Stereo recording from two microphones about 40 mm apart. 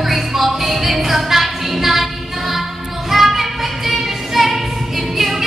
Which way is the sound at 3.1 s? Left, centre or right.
Centre.